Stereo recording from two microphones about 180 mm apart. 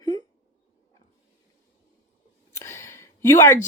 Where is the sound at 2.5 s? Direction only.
15° left (ahead or behind).